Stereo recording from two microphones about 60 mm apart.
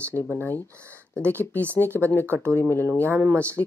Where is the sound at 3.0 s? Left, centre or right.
Right.